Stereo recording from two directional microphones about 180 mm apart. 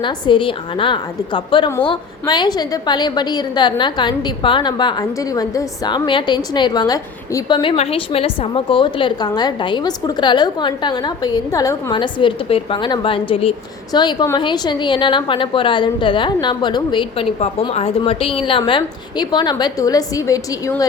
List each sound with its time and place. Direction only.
0.0 s a woman's voice: 25° left (ahead or behind)